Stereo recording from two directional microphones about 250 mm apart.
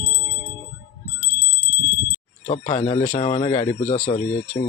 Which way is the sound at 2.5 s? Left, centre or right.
Left.